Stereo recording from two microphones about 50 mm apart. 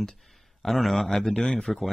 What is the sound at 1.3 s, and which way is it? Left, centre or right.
Speech, left.